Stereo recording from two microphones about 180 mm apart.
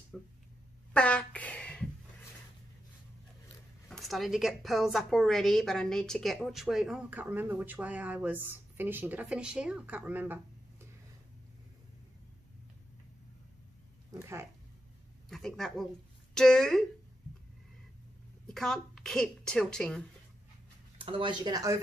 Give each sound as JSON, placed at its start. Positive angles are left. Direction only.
{"t": 0.1, "sound": "a woman's voice", "side_deg": 0}
{"t": 0.9, "sound": "a sound", "side_deg": 5}
{"t": 3.9, "sound": "a woman's voice", "side_deg": 0}
{"t": 15.2, "sound": "a woman's voice", "side_deg": 0}
{"t": 18.5, "sound": "a woman's voice", "side_deg": 5}
{"t": 21.0, "sound": "speech", "side_deg": -30}